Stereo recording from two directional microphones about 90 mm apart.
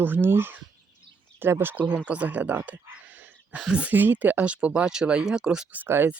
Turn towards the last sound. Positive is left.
turn(degrees=-20)  # may be behind; listen again after turning